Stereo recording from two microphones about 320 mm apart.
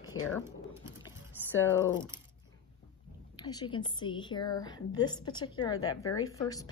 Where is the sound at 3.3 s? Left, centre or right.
Centre.